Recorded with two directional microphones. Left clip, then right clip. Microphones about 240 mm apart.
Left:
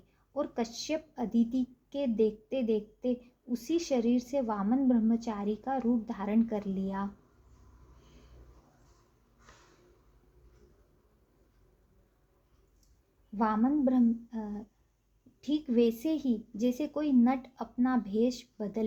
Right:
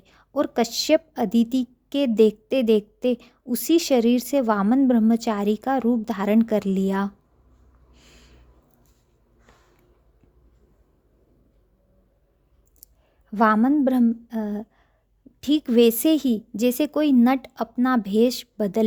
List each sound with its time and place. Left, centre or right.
0.1 s a woman's voice: right
13.3 s a woman's voice: right